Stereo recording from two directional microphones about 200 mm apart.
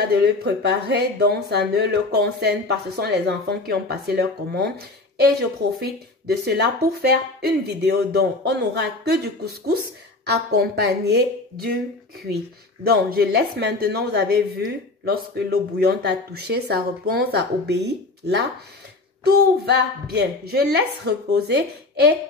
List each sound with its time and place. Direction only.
0.2 s a woman's voice: 55° right (ahead or behind)
12.8 s a woman's voice: 50° right (ahead or behind)